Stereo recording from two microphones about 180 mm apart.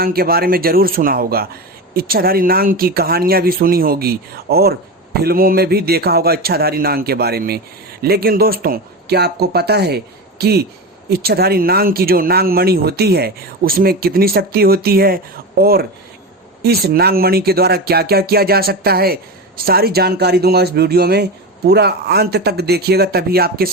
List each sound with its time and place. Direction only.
0.0 s speech: 55° right (ahead or behind)